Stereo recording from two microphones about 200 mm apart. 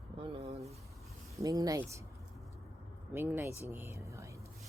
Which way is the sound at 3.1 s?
10° right (ahead or behind).